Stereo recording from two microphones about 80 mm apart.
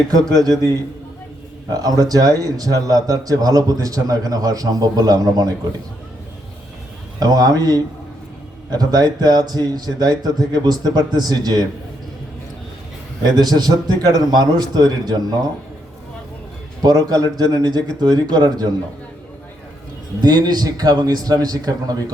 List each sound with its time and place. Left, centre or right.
0.1 s speech: right
7.2 s speech: right
13.2 s speech: right
16.8 s speech: right
20.2 s speech: right